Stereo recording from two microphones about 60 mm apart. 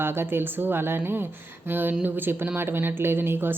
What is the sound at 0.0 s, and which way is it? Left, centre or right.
Speech, right.